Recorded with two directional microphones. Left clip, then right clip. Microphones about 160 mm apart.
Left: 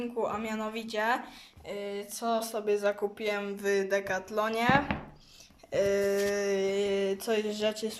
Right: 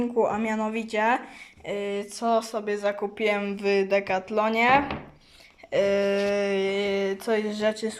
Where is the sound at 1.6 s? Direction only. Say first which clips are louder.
Right 7 dB; 15° right (ahead or behind).